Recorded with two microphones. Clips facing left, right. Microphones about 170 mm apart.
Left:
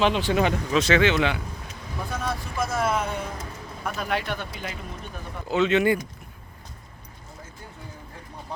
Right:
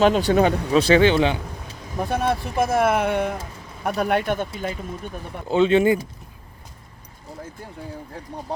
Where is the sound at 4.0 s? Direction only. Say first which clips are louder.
Right 8 dB; 55° right (ahead or behind).